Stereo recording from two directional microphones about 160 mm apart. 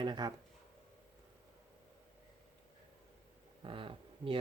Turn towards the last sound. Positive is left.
turn(degrees=-35)  # may be behind; listen again after turning